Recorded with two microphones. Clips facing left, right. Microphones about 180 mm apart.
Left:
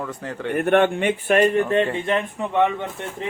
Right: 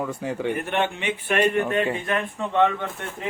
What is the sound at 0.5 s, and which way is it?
Speech, 55° left (ahead or behind).